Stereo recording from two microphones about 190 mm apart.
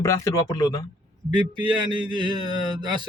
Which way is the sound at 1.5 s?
25° right (ahead or behind).